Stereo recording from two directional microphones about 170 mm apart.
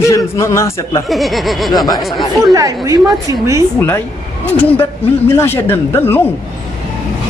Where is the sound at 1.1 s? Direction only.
Centre (ahead or behind).